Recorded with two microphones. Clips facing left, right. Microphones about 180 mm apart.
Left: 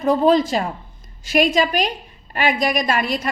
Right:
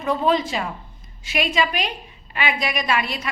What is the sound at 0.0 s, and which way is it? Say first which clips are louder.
A woman's voice: left 5 dB; 40° left (ahead or behind).